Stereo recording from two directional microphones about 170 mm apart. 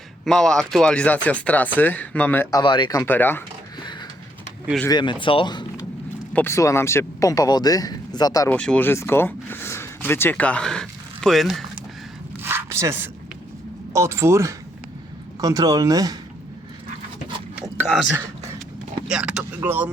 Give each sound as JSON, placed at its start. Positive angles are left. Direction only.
{"t": 0.3, "sound": "speech", "side_deg": 5}
{"t": 2.6, "sound": "speech", "side_deg": 25}
{"t": 4.9, "sound": "speech", "side_deg": 25}
{"t": 6.3, "sound": "speech", "side_deg": 15}
{"t": 8.4, "sound": "speech", "side_deg": 5}
{"t": 12.4, "sound": "a sound", "side_deg": -15}
{"t": 13.9, "sound": "speech", "side_deg": -15}
{"t": 17.8, "sound": "speech", "side_deg": 5}